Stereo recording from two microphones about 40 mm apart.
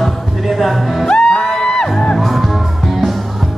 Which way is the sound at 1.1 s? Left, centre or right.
Left.